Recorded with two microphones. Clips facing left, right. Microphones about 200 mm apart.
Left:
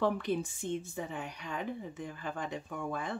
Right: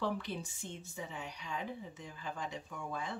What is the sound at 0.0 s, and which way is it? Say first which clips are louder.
A woman's voice: left 7 dB; 55° left (ahead or behind).